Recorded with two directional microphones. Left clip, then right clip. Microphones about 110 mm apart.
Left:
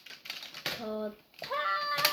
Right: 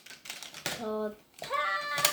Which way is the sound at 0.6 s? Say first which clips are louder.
Right 2 dB; 10° right (ahead or behind).